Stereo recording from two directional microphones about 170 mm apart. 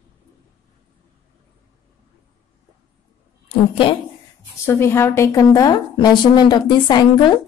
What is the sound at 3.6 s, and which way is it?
Speech, 30° left (ahead or behind).